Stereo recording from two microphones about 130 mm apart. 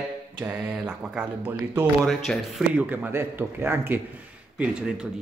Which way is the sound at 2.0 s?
Centre (ahead or behind).